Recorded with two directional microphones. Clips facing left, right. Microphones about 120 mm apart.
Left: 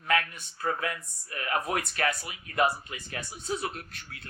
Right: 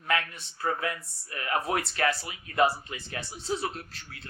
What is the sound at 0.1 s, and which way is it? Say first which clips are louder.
Speech: left 1 dB; 25° right (ahead or behind).